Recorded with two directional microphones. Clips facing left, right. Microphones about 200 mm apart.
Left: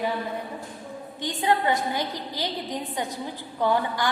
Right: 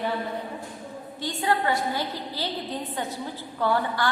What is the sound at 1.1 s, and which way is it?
A woman's voice, 20° left (ahead or behind).